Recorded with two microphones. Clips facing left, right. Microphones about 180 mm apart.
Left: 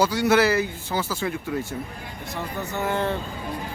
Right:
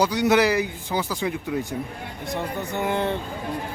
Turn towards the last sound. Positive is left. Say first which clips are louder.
# right 1 dB
turn(degrees=-15)  # may be behind; listen again after turning